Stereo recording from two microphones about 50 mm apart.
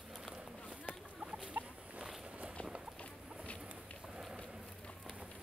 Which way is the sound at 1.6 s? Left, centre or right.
Right.